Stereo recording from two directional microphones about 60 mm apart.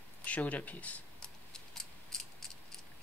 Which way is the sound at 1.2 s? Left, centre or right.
Centre.